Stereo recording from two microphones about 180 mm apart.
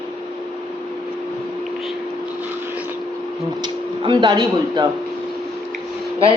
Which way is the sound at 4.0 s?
25° right (ahead or behind).